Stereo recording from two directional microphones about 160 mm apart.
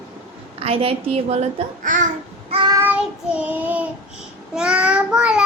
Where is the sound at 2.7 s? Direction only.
10° right (ahead or behind).